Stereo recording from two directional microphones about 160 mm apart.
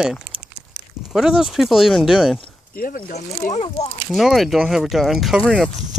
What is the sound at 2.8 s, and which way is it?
Speech, 55° left (ahead or behind).